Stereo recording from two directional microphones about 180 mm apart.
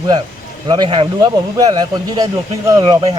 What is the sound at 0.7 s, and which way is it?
A man's voice, 25° right (ahead or behind).